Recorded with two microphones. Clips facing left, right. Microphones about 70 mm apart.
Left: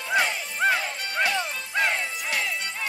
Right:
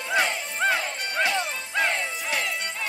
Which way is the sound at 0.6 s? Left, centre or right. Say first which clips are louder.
Left 1 dB; centre.